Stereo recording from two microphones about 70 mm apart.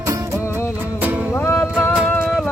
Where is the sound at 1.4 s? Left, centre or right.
Left.